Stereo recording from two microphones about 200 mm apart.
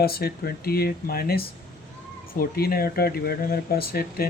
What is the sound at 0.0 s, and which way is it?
Speech, 50° left (ahead or behind).